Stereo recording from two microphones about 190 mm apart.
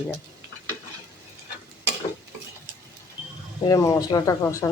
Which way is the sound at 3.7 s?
15° left (ahead or behind).